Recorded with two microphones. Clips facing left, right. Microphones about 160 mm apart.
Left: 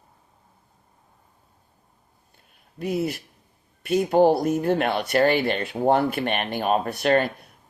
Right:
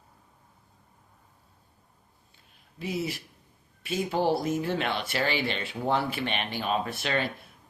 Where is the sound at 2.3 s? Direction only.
50° left (ahead or behind).